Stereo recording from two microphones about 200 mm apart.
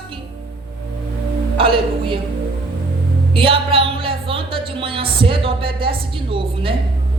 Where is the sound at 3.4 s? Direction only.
25° right (ahead or behind).